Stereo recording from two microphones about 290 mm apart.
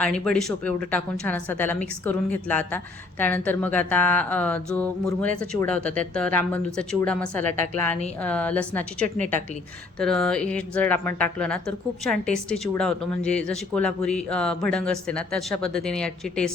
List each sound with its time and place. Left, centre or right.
0.0 s a woman's voice: centre
9.0 s a woman's voice: right
10.0 s a woman's voice: centre